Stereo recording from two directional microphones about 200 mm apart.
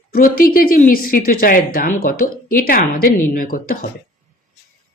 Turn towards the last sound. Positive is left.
turn(degrees=45)  # may be behind; listen again after turning